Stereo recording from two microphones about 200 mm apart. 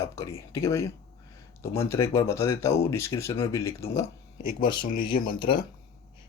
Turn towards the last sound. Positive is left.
turn(degrees=25)  # may be behind; listen again after turning